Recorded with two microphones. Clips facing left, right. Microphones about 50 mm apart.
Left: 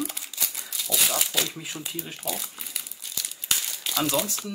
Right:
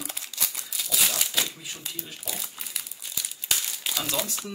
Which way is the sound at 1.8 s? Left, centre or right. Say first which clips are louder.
Left 4 dB; centre.